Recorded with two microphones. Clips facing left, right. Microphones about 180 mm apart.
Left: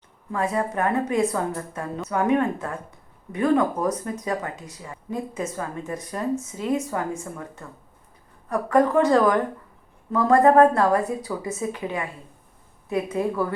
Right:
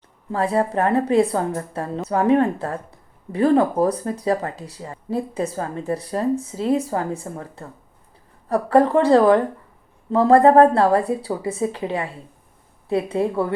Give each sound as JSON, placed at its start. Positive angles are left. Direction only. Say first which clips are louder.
{"t": 0.3, "sound": "a woman's voice", "louder": "right 4 dB", "side_deg": -30}